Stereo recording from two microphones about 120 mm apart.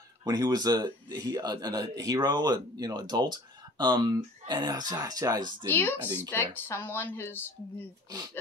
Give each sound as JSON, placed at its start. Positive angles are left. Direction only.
{"t": 0.2, "sound": "a man's voice", "side_deg": -35}
{"t": 5.7, "sound": "speech", "side_deg": 15}
{"t": 5.9, "sound": "speech", "side_deg": -15}
{"t": 6.5, "sound": "speech", "side_deg": 20}